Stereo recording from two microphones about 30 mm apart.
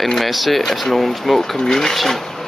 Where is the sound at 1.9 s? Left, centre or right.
Centre.